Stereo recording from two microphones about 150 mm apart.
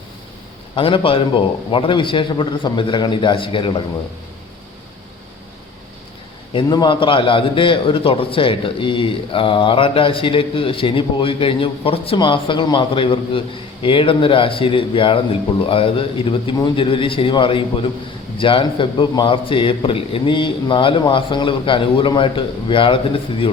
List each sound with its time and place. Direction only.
0.8 s a man's voice: 35° left (ahead or behind)
6.5 s a man's voice: 30° left (ahead or behind)